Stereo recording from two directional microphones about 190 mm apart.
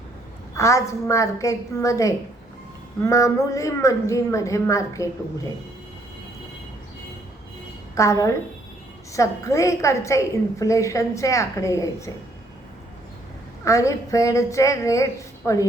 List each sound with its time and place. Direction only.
0.5 s a woman's voice: 15° left (ahead or behind)
7.9 s a woman's voice: 15° left (ahead or behind)
13.7 s a woman's voice: 15° left (ahead or behind)